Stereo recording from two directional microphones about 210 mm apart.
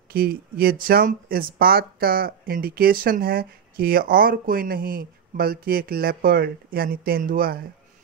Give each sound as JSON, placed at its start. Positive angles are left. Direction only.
{"t": 0.1, "sound": "speech", "side_deg": -45}